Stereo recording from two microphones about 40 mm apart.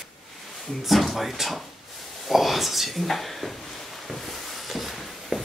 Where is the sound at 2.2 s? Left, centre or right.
Centre.